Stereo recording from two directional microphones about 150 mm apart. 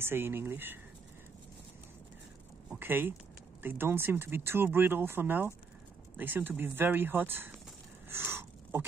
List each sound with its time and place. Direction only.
0.0 s speech: 15° right (ahead or behind)
2.7 s speech: 15° right (ahead or behind)
8.1 s a sound: 15° right (ahead or behind)